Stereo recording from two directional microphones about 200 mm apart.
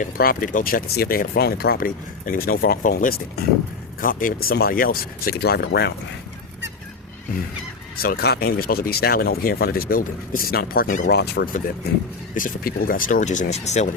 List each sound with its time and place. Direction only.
0.0 s speech: 45° left (ahead or behind)
7.9 s speech: 50° left (ahead or behind)
12.3 s speech: 45° left (ahead or behind)